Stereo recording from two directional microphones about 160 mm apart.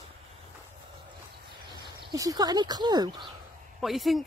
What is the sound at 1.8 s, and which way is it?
Speech, 25° right (ahead or behind).